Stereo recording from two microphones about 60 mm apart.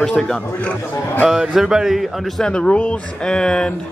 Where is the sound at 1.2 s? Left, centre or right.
Centre.